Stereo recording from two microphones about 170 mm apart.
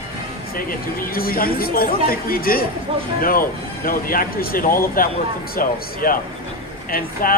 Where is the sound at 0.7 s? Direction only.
60° left (ahead or behind).